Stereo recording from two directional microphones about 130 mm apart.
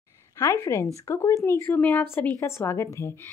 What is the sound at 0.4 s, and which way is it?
Speech, 20° left (ahead or behind).